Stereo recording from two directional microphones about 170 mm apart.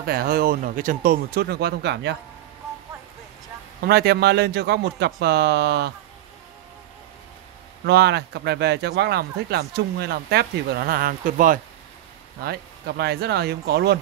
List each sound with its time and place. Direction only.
0.0 s speech: 65° right (ahead or behind); by 2.1 s 90° right
3.8 s speech: 70° right (ahead or behind)
7.8 s speech: 80° right; by 11.6 s 50° right (ahead or behind)
12.4 s speech: 70° right (ahead or behind)